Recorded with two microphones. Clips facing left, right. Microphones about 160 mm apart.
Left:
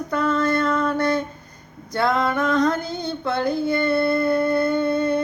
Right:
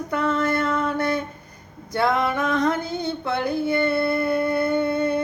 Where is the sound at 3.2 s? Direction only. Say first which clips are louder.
Left 3 dB; 25° right (ahead or behind).